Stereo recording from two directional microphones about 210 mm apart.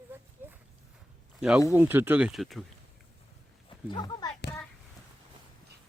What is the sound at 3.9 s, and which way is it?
Speech, 20° left (ahead or behind).